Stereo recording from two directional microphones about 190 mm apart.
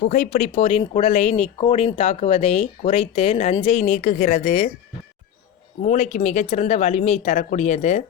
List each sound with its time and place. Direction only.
0.1 s speech: 40° left (ahead or behind)
5.8 s speech: 35° left (ahead or behind)